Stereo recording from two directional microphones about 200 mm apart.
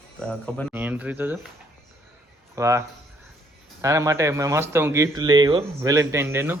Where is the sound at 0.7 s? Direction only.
10° right (ahead or behind).